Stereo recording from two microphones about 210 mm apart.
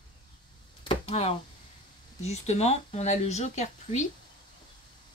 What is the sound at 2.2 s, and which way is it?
A woman's voice, 30° left (ahead or behind).